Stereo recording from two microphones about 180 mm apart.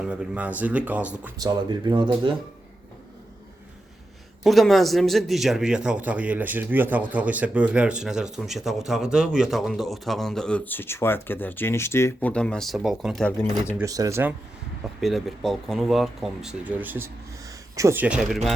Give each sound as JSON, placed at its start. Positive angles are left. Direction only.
{"t": 0.0, "sound": "speech", "side_deg": -5}
{"t": 1.4, "sound": "speech", "side_deg": -25}
{"t": 4.4, "sound": "a man's voice", "side_deg": 0}
{"t": 13.7, "sound": "speech", "side_deg": -20}
{"t": 15.0, "sound": "a man's voice", "side_deg": 0}